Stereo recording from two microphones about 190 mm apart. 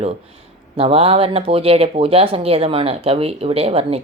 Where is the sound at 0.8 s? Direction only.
30° right (ahead or behind).